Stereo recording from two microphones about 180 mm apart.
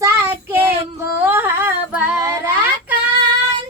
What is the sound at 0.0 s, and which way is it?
Child singing, 10° right (ahead or behind).